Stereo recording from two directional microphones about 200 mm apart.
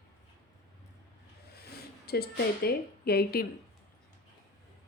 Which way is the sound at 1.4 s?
55° left (ahead or behind).